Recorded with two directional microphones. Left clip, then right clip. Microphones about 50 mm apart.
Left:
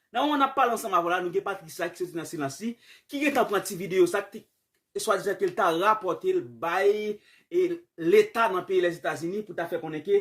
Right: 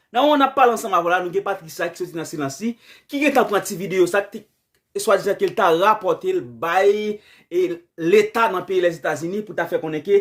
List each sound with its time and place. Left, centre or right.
0.1 s speech: right
0.4 s speech: right
2.3 s speech: centre
3.1 s speech: right
9.3 s speech: right